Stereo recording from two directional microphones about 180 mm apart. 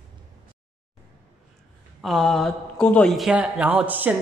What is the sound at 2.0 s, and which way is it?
Speech, centre (ahead or behind).